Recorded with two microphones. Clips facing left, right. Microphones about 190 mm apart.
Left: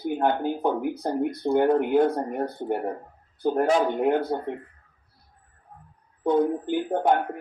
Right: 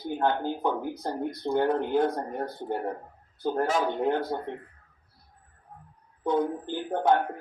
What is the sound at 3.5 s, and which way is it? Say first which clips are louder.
Speech: left 5 dB; 15° left (ahead or behind).